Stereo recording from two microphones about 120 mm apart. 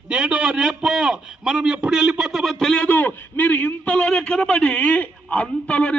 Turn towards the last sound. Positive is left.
turn(degrees=10)  # may be behind; listen again after turning